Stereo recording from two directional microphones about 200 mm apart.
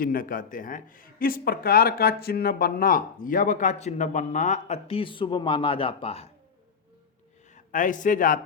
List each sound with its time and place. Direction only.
0.0 s speech: 45° left (ahead or behind)
7.5 s a man's voice: 40° left (ahead or behind)